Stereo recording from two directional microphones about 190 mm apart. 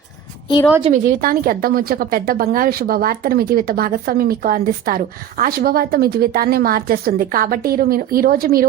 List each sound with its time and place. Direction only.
0.9 s speech: 45° right (ahead or behind)